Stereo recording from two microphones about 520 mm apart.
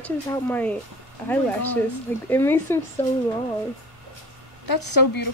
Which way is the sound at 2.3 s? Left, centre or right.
Centre.